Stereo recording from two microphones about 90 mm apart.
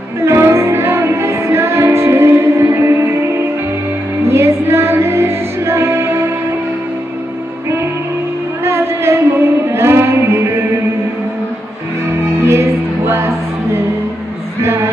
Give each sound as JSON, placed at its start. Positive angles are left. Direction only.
{"t": 0.3, "sound": "music", "side_deg": -30}
{"t": 8.6, "sound": "music", "side_deg": -30}
{"t": 12.5, "sound": "music", "side_deg": -30}
{"t": 14.6, "sound": "music", "side_deg": -30}